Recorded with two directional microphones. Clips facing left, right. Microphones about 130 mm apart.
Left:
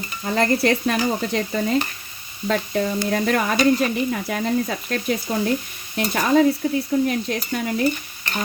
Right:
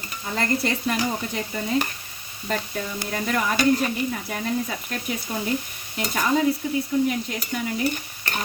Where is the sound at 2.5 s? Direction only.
65° left (ahead or behind).